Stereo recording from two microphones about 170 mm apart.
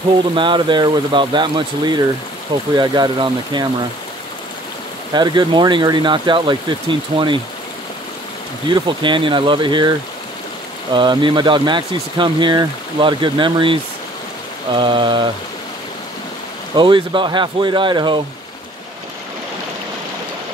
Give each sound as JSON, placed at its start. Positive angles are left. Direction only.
{"t": 0.3, "sound": "speech", "side_deg": -30}
{"t": 5.1, "sound": "speech", "side_deg": -25}
{"t": 8.6, "sound": "speech", "side_deg": -25}
{"t": 16.7, "sound": "speech", "side_deg": -30}